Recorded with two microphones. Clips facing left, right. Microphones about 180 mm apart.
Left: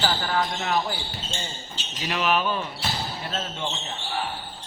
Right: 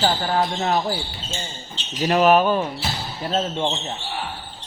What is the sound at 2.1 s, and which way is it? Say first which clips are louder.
Speech: right 8 dB; 45° right (ahead or behind).